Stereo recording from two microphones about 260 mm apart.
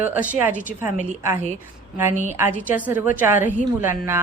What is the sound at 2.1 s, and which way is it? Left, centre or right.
Speech, right.